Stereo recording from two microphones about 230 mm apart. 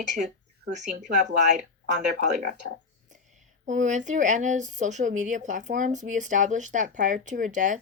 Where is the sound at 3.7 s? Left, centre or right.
Right.